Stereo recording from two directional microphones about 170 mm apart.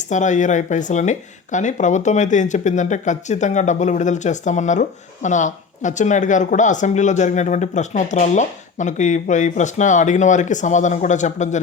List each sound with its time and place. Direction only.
0.0 s speech: 45° left (ahead or behind)